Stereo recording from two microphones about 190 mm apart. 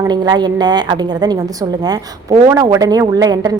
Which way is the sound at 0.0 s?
20° right (ahead or behind).